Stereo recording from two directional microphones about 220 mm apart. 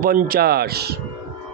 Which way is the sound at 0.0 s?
40° right (ahead or behind).